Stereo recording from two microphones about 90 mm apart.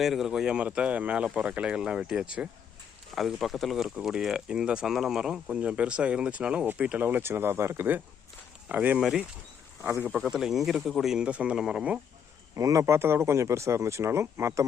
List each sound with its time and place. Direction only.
0.0 s speech: 5° right (ahead or behind)
3.1 s speech: centre (ahead or behind); by 9.0 s 20° right (ahead or behind)
9.0 s speech: 5° right (ahead or behind)
9.8 s speech: 20° right (ahead or behind)
10.1 s speech: 5° right (ahead or behind)
12.5 s speech: 40° right (ahead or behind)